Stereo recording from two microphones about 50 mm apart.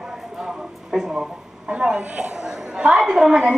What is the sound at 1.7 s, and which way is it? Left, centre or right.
A woman's voice, centre.